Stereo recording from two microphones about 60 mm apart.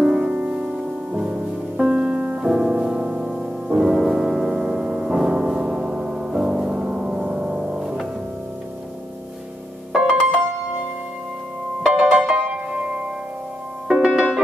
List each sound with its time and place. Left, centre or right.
0.0 s music: centre
9.9 s music: centre
11.8 s music: centre
12.4 s music: right